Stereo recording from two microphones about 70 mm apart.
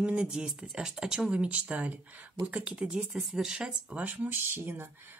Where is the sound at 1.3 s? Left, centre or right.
Centre.